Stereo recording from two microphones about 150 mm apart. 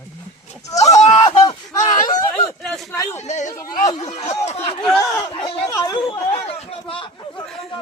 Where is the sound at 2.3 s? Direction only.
5° left (ahead or behind).